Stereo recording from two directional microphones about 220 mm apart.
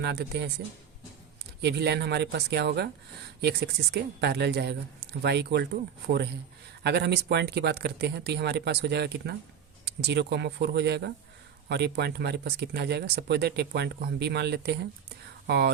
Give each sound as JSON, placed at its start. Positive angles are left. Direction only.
{"t": 0.0, "sound": "speech", "side_deg": -50}
{"t": 1.6, "sound": "speech", "side_deg": -50}
{"t": 6.8, "sound": "speech", "side_deg": -50}